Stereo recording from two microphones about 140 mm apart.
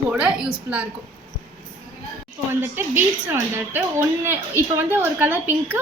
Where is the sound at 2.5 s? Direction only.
15° right (ahead or behind).